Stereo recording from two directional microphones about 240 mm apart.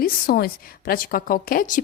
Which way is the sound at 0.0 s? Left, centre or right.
Left.